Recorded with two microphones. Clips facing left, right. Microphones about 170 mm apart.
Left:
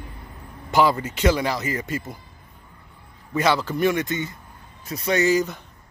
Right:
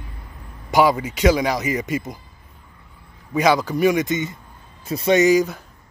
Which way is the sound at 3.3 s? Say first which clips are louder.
Right 4 dB; 15° right (ahead or behind).